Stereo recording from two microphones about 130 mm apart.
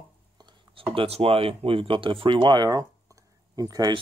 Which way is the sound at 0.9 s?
50° right (ahead or behind).